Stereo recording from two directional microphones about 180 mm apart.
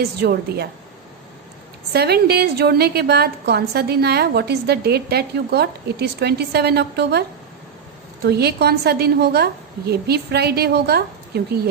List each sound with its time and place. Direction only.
0.0 s a woman's voice: 60° right (ahead or behind)
1.9 s a woman's voice: 60° right (ahead or behind)